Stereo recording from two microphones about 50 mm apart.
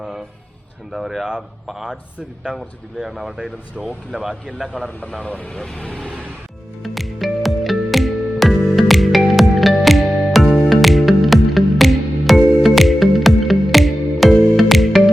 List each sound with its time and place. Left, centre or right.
0.9 s a man's voice: centre
5.2 s speech: left
6.8 s music: centre